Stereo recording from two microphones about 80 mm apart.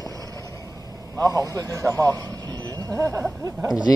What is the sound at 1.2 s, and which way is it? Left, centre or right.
Speech, right.